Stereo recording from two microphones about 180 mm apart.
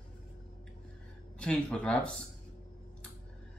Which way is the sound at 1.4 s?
5° left (ahead or behind).